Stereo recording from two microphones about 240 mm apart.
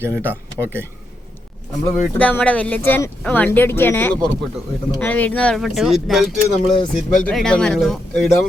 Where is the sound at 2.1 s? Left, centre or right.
Centre.